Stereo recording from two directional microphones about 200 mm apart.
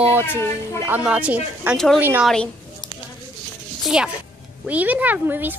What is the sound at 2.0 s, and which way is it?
Speech, 10° right (ahead or behind).